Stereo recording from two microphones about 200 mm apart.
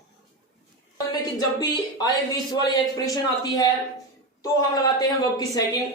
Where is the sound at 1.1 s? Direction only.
20° left (ahead or behind).